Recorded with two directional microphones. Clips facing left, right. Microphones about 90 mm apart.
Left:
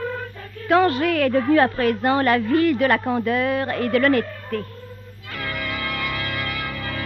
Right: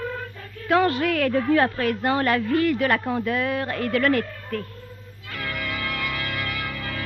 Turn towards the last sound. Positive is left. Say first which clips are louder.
# left 2 dB
turn(degrees=45)  # may be behind; listen again after turning